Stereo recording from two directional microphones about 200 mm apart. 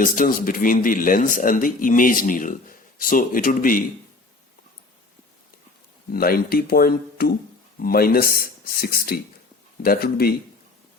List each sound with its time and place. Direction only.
0.0 s a man's voice: 45° left (ahead or behind)
6.1 s a man's voice: 50° left (ahead or behind)